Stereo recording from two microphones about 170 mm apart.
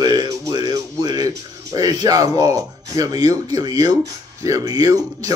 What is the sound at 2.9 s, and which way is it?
Speech, 20° right (ahead or behind).